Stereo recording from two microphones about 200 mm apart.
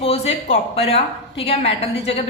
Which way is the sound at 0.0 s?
30° left (ahead or behind).